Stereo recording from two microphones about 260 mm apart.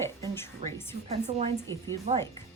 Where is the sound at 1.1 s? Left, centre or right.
Right.